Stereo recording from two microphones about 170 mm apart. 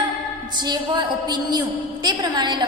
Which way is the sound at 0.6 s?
25° right (ahead or behind).